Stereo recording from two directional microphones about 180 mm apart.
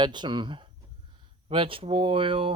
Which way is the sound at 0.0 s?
25° right (ahead or behind).